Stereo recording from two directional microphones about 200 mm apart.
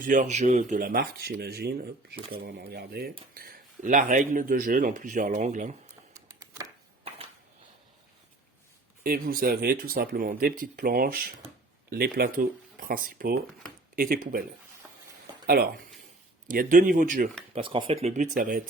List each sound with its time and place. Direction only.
0.0 s speech: 40° right (ahead or behind)
6.1 s a sound: 15° right (ahead or behind)
9.0 s speech: 45° right (ahead or behind)
15.4 s speech: 50° right (ahead or behind)
17.5 s speech: 25° right (ahead or behind); by 18.7 s 45° right (ahead or behind)